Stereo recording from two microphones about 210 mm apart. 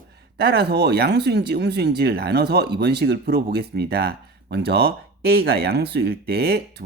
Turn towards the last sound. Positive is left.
turn(degrees=-50)  # may be behind; listen again after turning